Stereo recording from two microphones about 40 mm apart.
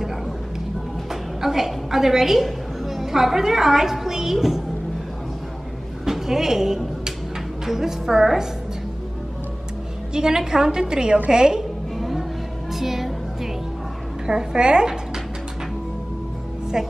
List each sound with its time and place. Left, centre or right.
1.4 s a woman's voice: centre
6.0 s a woman's voice: centre
10.1 s a woman's voice: centre
12.0 s music: centre
14.2 s a woman's voice: centre
16.8 s a woman's voice: centre